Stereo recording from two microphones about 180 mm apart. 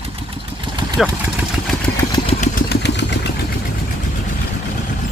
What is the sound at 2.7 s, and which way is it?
Vehicle, 75° left (ahead or behind).